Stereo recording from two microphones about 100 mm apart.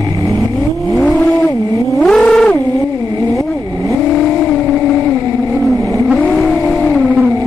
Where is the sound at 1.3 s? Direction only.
30° left (ahead or behind).